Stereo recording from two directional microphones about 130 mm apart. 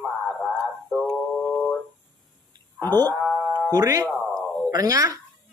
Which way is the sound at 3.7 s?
25° right (ahead or behind).